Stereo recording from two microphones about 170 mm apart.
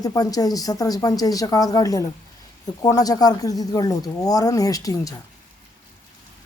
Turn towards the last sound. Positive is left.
turn(degrees=20)  # may be behind; listen again after turning